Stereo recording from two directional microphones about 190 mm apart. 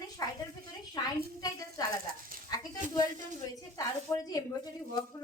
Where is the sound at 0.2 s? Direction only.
20° left (ahead or behind).